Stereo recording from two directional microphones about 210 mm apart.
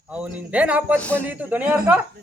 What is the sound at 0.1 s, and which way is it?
A woman's voice, 5° right (ahead or behind).